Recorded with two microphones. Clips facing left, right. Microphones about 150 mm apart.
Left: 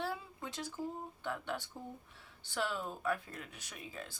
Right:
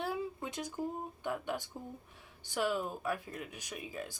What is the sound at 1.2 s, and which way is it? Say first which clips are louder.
Speech: right 3 dB; 15° right (ahead or behind).